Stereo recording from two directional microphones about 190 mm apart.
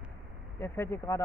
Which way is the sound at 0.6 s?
15° left (ahead or behind).